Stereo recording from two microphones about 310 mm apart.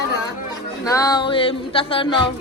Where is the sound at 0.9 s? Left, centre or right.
Centre.